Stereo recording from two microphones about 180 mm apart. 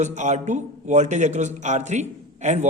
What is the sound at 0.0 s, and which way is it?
A man's voice, 40° right (ahead or behind).